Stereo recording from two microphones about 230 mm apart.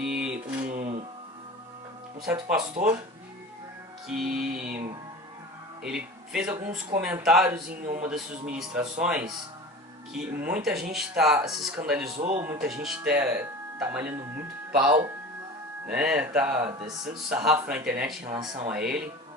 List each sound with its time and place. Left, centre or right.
0.0 s mantra: centre
0.3 s a sound: right
2.2 s speech: centre
2.6 s speech: right
4.2 s speech: centre
5.8 s speech: centre
7.7 s speech: right
8.5 s speech: centre
12.1 s speech: right
12.4 s speech: centre
16.6 s speech: right
17.2 s speech: centre